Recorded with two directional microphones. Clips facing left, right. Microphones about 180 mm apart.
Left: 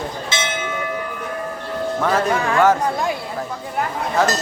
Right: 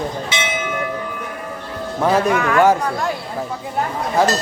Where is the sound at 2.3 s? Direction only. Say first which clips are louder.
Right 2 dB; 30° left (ahead or behind).